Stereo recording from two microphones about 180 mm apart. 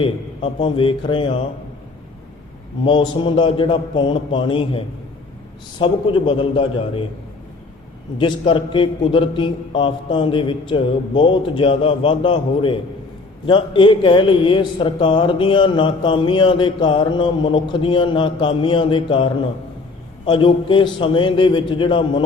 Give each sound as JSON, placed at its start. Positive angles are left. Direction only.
{"t": 0.0, "sound": "a man's voice", "side_deg": 30}
{"t": 2.8, "sound": "a man's voice", "side_deg": 30}
{"t": 5.8, "sound": "a man's voice", "side_deg": 30}
{"t": 8.2, "sound": "a man's voice", "side_deg": 30}